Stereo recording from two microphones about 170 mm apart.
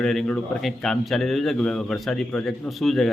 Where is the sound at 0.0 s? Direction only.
Centre (ahead or behind).